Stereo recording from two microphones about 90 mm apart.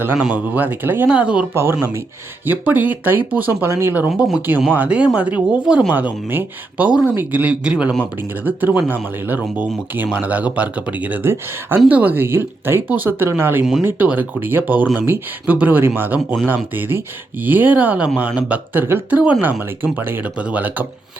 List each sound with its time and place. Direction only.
0.0 s speech: 20° right (ahead or behind)
1.5 s speech: 25° right (ahead or behind)